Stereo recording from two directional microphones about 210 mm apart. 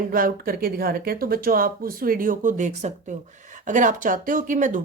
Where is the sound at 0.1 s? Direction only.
45° right (ahead or behind).